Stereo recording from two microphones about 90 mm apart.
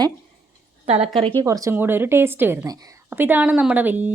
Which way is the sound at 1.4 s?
35° right (ahead or behind).